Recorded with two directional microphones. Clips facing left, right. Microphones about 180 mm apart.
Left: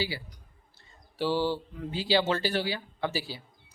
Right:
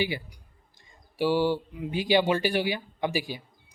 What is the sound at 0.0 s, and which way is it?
Speech, 15° right (ahead or behind).